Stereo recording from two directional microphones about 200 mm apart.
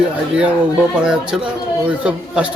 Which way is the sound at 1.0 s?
5° right (ahead or behind).